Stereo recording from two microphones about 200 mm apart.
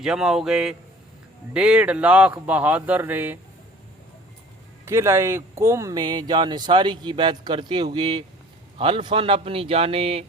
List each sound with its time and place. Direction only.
0.0 s a man's voice: 5° right (ahead or behind)
4.9 s speech: 15° right (ahead or behind)